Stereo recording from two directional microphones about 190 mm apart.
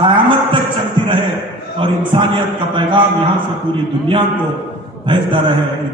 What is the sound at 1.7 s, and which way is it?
Speech, 25° right (ahead or behind).